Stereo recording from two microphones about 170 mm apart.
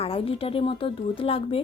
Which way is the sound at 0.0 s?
35° left (ahead or behind).